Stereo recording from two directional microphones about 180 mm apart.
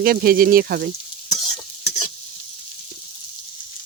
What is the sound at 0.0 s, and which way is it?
Speech, 55° right (ahead or behind).